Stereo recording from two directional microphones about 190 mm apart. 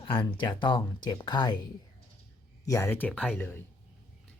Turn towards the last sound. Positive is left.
turn(degrees=10)  # may be behind; listen again after turning